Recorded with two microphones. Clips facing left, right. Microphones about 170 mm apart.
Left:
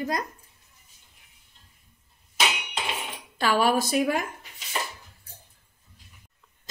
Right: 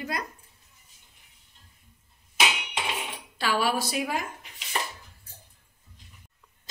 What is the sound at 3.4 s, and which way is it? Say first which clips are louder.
Speech: left 4 dB; 45° left (ahead or behind).